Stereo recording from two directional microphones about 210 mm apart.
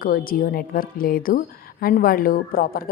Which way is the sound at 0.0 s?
45° left (ahead or behind).